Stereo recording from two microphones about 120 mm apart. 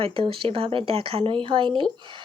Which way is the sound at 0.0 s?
50° right (ahead or behind).